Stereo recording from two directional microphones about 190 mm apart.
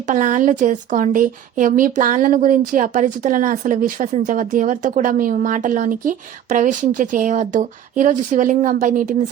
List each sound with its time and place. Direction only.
0.1 s a woman's voice: 40° right (ahead or behind)